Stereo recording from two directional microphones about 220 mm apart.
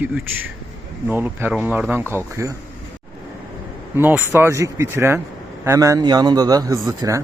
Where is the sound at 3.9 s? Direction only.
10° right (ahead or behind).